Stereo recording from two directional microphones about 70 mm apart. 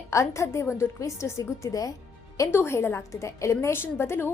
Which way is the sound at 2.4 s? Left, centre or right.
Left.